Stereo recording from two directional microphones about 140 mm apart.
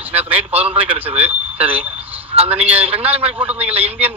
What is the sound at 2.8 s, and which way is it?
A man's voice, 45° right (ahead or behind).